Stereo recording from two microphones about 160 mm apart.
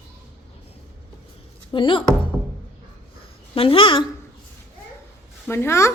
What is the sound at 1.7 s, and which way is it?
Speech, 30° left (ahead or behind).